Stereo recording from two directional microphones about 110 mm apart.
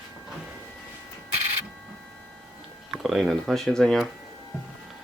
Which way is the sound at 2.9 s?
Centre (ahead or behind).